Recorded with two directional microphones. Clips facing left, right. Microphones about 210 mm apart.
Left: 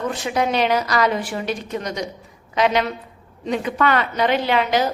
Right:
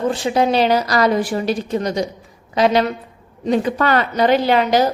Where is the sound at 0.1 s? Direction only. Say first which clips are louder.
Right 4 dB; 30° right (ahead or behind).